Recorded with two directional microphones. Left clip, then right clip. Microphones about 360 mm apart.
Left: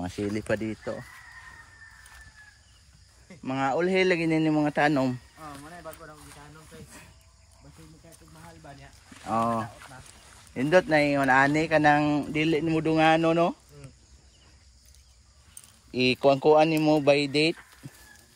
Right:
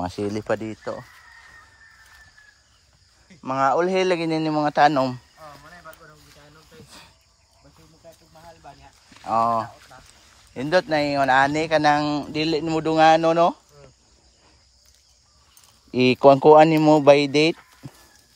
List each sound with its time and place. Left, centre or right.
0.0 s speech: centre
3.4 s speech: centre
9.2 s speech: centre
16.2 s speech: right